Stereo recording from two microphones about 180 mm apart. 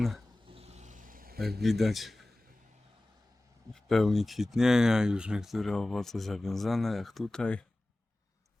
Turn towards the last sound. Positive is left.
turn(degrees=5)  # may be behind; listen again after turning